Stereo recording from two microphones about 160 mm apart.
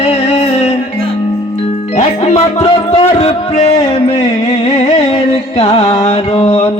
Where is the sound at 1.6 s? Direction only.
40° left (ahead or behind).